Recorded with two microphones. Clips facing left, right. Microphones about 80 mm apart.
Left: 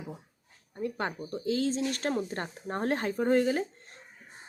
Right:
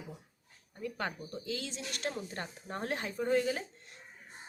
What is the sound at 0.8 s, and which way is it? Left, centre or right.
A woman's voice, left.